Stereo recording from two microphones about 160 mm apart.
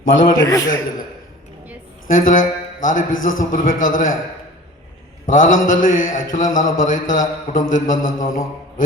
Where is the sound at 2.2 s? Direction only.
55° left (ahead or behind).